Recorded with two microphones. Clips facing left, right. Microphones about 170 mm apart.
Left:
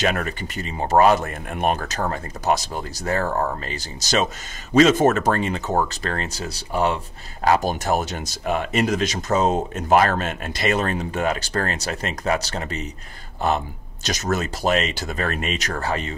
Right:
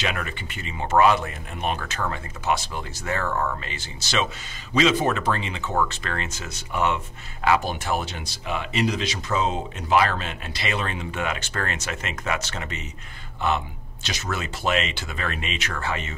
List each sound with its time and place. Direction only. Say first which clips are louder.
0.0 s speech: left 6 dB; 40° left (ahead or behind)